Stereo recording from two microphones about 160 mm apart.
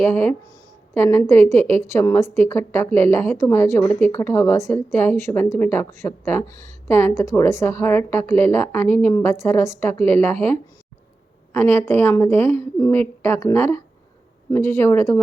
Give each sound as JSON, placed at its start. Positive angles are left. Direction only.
{"t": 0.0, "sound": "speech", "side_deg": 15}
{"t": 11.5, "sound": "speech", "side_deg": 10}